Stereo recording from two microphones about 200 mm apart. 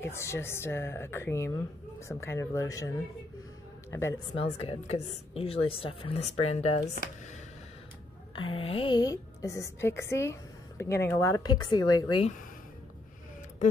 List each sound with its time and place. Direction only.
0.0 s a woman's voice: 15° left (ahead or behind)
3.9 s a woman's voice: 15° left (ahead or behind)
4.3 s speech: 30° left (ahead or behind)
8.4 s a woman's voice: 25° left (ahead or behind)